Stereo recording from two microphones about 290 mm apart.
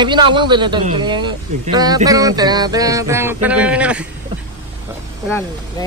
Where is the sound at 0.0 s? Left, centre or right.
Centre.